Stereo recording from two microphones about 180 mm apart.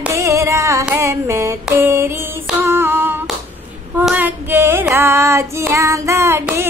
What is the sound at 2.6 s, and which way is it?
Female singing, 15° right (ahead or behind).